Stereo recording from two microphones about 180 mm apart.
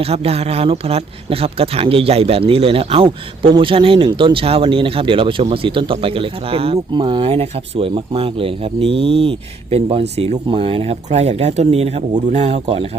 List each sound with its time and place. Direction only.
0.0 s speech: 35° right (ahead or behind)